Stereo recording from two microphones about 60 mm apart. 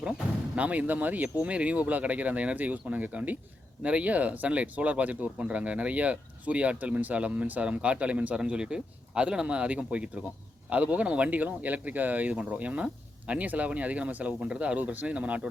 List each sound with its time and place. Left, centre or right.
0.5 s speech: right